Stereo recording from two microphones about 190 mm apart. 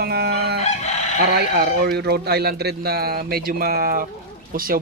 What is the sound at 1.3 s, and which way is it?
A man's voice, 55° right (ahead or behind).